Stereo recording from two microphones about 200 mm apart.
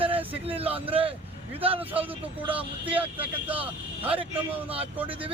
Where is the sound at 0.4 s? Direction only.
30° right (ahead or behind).